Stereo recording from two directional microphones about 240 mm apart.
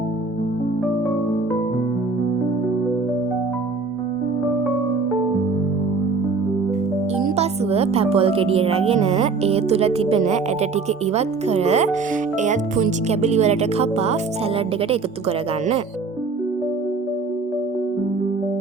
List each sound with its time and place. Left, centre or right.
7.3 s speech: right